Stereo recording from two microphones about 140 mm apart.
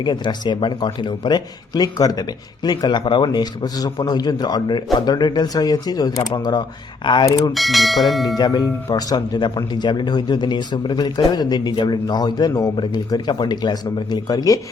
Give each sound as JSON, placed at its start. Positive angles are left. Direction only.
{"t": 0.0, "sound": "speech", "side_deg": 30}
{"t": 7.5, "sound": "speech", "side_deg": 0}
{"t": 8.4, "sound": "speech", "side_deg": 30}